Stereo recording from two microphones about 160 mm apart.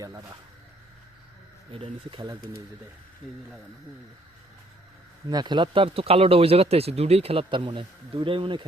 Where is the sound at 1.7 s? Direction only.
35° right (ahead or behind).